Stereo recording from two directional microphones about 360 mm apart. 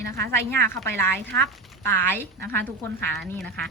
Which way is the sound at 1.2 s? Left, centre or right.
Right.